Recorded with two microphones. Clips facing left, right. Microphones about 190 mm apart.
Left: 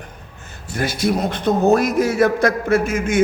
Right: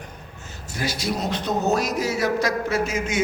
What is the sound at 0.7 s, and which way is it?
A man's voice, 55° left (ahead or behind).